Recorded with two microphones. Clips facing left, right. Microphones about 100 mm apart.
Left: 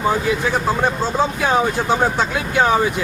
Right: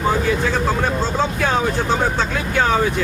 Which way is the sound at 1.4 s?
15° left (ahead or behind).